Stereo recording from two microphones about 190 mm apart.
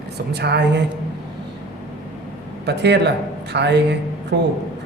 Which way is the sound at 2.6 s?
65° right (ahead or behind).